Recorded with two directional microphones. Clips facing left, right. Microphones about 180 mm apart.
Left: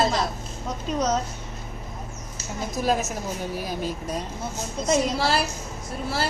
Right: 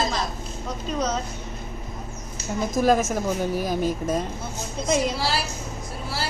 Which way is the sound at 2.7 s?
45° right (ahead or behind).